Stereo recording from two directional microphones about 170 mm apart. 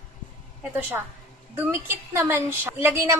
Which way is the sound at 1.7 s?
15° right (ahead or behind).